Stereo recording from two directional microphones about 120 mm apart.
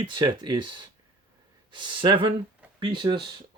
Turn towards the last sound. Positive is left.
turn(degrees=-40)  # may be behind; listen again after turning